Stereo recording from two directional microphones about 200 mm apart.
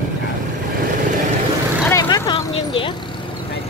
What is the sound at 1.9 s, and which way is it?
Vehicle, 15° left (ahead or behind).